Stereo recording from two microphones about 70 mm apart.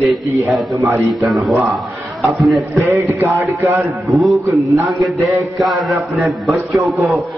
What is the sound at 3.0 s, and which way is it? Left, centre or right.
Speech, right.